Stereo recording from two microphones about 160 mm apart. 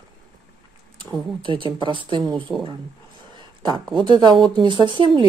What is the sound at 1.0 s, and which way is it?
Speech, 30° right (ahead or behind).